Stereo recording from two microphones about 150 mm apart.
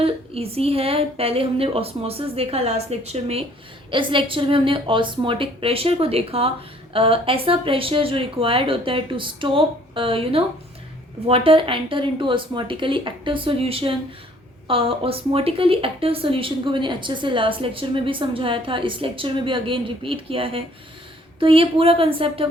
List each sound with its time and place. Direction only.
0.0 s a woman's voice: 40° right (ahead or behind)